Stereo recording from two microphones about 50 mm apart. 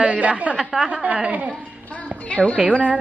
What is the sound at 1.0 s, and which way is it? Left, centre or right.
Speech, centre.